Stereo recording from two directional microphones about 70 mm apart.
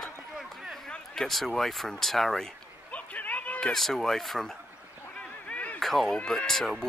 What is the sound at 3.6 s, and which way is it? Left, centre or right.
Speech, centre.